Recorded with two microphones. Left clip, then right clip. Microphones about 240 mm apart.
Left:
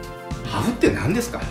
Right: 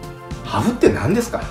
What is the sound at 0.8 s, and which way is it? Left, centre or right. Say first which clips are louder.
Speech: right 4 dB; centre.